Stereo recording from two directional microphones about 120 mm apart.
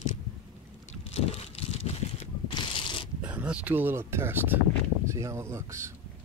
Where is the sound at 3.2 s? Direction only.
10° right (ahead or behind).